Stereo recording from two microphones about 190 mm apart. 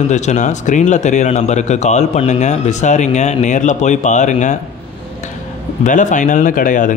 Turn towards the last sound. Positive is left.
turn(degrees=45)  # may be behind; listen again after turning